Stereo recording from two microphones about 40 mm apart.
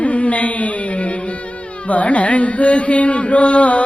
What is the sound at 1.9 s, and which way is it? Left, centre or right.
Carnatic music, left.